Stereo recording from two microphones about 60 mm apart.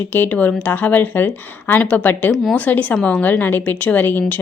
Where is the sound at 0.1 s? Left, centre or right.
Left.